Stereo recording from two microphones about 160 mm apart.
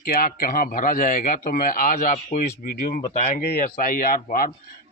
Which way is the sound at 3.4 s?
65° left (ahead or behind).